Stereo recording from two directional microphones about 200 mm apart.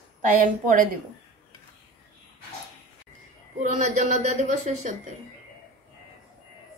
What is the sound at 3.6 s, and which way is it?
Speech, 35° right (ahead or behind).